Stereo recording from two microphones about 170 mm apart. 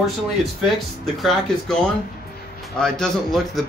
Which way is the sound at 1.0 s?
Centre (ahead or behind).